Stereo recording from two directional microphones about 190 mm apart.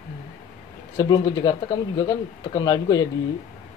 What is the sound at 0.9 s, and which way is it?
Speech, 20° left (ahead or behind).